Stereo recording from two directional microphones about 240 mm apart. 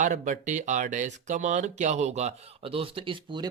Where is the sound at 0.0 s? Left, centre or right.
Right.